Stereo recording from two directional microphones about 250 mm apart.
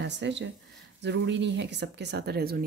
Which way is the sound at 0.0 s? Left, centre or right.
Right.